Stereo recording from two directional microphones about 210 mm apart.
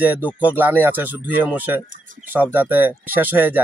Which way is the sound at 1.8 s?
40° right (ahead or behind).